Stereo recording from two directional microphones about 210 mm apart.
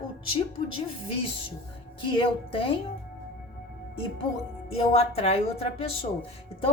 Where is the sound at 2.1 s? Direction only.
25° left (ahead or behind).